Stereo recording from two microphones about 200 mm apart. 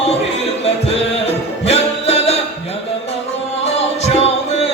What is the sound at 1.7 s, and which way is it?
Music, 30° left (ahead or behind).